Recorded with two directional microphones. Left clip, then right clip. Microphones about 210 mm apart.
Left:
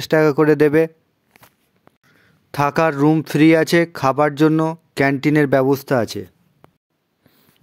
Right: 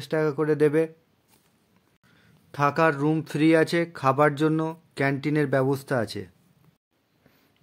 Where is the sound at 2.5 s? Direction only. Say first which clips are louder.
Left 5 dB; 45° left (ahead or behind); by 6.2 s 30° left (ahead or behind).